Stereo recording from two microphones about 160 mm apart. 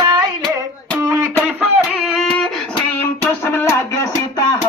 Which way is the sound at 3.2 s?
15° left (ahead or behind).